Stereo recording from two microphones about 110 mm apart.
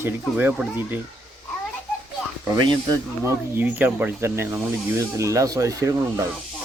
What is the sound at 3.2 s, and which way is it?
Speech, 20° right (ahead or behind).